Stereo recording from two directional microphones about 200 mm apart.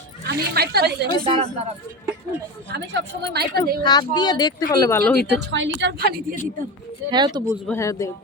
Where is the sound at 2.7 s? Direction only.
55° right (ahead or behind).